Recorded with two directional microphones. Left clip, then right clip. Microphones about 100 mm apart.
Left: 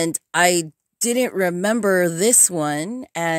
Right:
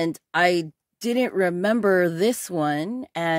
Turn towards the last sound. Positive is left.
turn(degrees=25)  # may be behind; listen again after turning